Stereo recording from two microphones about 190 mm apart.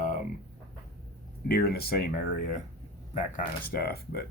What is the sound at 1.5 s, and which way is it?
Speech, 55° left (ahead or behind).